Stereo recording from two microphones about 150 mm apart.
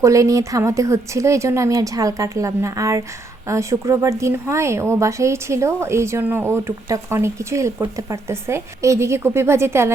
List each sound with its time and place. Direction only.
0.0 s a woman's voice: 20° right (ahead or behind)